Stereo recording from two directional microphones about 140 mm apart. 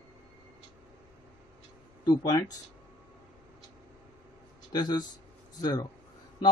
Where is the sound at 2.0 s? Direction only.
30° left (ahead or behind).